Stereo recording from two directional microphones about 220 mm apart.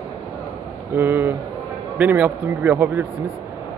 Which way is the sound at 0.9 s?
10° right (ahead or behind).